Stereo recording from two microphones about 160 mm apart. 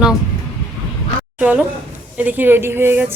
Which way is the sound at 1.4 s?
10° right (ahead or behind).